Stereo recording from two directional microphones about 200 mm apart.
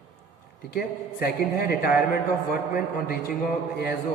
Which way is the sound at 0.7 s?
50° left (ahead or behind).